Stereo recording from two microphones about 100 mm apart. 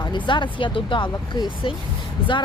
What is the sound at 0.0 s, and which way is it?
Speech, 50° left (ahead or behind).